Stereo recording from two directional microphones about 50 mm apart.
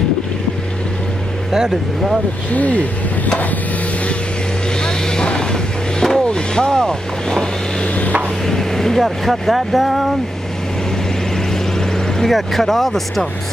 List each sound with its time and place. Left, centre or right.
1.5 s speech: centre
2.5 s speech: left
4.8 s vehicle: centre
6.2 s speech: centre
8.5 s speech: centre
12.2 s speech: centre